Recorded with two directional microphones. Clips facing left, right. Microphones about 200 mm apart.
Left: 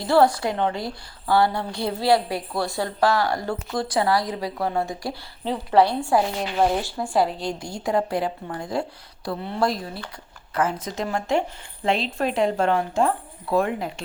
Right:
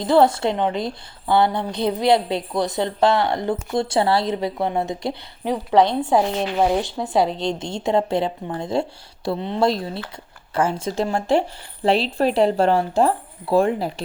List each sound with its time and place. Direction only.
0.0 s a woman's voice: 20° right (ahead or behind)
6.6 s speech: 10° right (ahead or behind)
7.3 s a woman's voice: 25° right (ahead or behind)